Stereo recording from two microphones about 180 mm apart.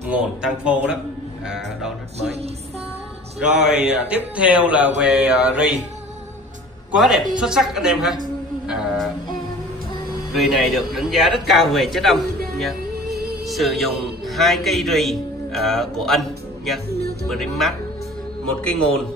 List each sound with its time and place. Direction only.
0.1 s speech: 5° right (ahead or behind)
3.3 s speech: 5° right (ahead or behind)
6.9 s speech: centre (ahead or behind)
8.6 s a sound: 5° right (ahead or behind)
10.3 s speech: centre (ahead or behind)
13.5 s a man's voice: centre (ahead or behind)